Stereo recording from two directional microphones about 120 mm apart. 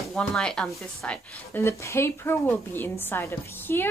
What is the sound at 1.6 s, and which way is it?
A woman's voice, 25° left (ahead or behind).